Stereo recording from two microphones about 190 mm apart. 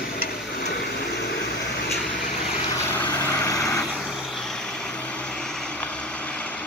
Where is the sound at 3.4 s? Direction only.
15° left (ahead or behind).